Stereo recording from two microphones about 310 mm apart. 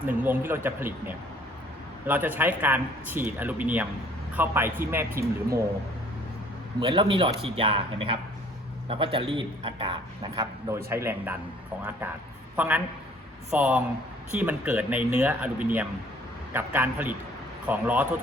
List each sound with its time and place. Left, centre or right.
0.0 s a man's voice: centre
6.7 s a man's voice: centre